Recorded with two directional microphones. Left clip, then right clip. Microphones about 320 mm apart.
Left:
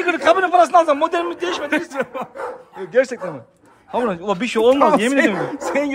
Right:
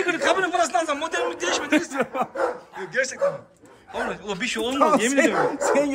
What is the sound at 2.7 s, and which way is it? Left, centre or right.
Speech, centre.